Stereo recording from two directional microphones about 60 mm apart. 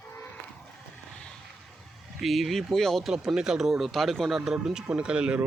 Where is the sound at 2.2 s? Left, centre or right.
Centre.